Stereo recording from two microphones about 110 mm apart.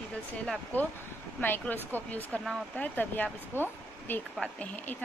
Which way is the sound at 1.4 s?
15° left (ahead or behind).